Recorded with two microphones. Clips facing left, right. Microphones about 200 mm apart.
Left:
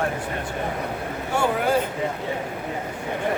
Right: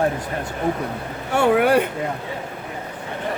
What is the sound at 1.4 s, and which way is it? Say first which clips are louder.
Speech: right 6 dB; 65° right (ahead or behind).